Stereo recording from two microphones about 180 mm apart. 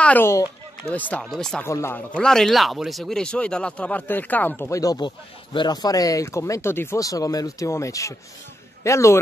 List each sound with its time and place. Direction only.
0.0 s speech: 10° left (ahead or behind)
1.7 s speech: 15° left (ahead or behind)